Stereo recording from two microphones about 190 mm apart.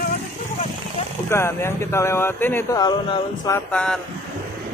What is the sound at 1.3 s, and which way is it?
Speech, 15° left (ahead or behind).